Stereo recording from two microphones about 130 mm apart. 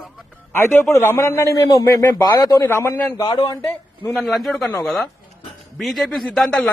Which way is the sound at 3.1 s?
35° left (ahead or behind).